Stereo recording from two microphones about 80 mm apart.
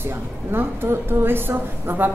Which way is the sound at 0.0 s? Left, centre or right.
Right.